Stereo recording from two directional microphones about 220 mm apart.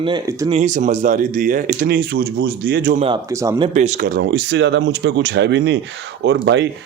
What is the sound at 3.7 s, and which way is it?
Speech, 35° right (ahead or behind).